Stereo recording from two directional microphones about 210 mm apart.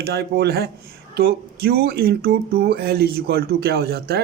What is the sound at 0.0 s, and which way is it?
Speech, 50° right (ahead or behind).